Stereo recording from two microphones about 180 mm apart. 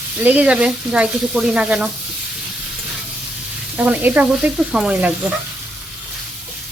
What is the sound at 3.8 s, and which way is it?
Speech, 10° right (ahead or behind).